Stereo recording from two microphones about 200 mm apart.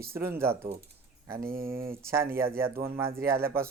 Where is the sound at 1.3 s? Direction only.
45° right (ahead or behind).